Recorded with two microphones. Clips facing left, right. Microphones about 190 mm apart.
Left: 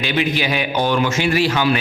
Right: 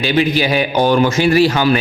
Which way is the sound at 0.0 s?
35° right (ahead or behind).